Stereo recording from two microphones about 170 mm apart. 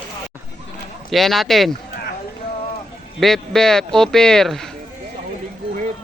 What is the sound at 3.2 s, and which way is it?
Speech, centre (ahead or behind).